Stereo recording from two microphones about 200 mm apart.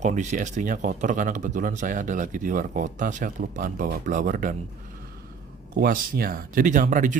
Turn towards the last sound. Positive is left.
turn(degrees=-40)  # may be behind; listen again after turning